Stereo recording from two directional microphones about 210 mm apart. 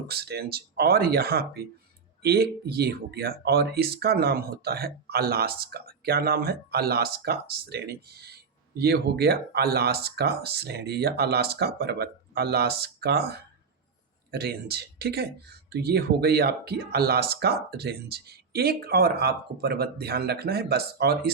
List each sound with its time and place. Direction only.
0.1 s speech: 50° right (ahead or behind)